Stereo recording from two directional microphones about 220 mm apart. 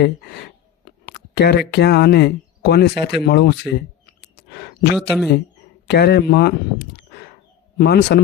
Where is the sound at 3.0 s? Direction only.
50° left (ahead or behind).